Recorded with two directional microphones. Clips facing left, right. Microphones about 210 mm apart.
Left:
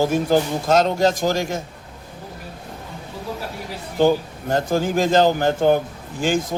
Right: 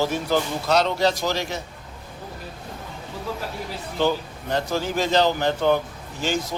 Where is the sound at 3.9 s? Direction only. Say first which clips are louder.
Left 6 dB; 45° left (ahead or behind).